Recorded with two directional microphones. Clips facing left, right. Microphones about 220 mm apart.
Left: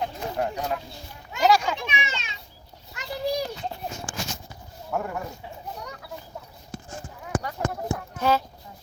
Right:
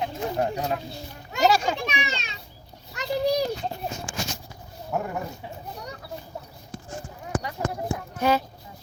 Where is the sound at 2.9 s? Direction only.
35° right (ahead or behind).